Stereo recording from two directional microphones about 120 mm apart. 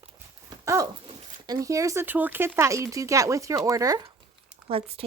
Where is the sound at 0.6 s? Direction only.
25° right (ahead or behind).